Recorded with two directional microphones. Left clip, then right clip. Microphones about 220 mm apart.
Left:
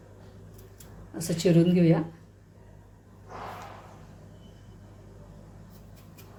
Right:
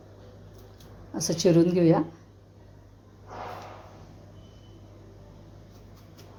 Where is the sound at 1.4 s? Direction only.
20° right (ahead or behind).